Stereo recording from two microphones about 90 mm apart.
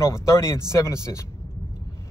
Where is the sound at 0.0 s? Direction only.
35° left (ahead or behind).